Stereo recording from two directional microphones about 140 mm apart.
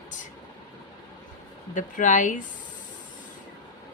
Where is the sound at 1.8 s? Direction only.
65° left (ahead or behind).